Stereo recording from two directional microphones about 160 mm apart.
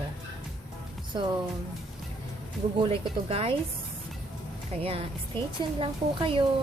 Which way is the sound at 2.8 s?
35° right (ahead or behind).